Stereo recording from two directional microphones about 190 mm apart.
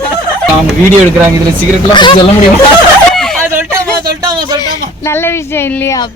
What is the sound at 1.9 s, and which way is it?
Speech, 25° left (ahead or behind).